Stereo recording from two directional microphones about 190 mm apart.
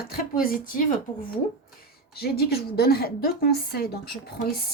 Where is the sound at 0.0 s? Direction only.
50° left (ahead or behind).